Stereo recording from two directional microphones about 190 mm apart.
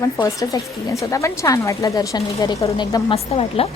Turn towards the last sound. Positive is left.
turn(degrees=30)  # may be behind; listen again after turning